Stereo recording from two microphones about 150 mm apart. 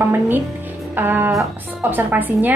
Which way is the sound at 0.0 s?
15° right (ahead or behind).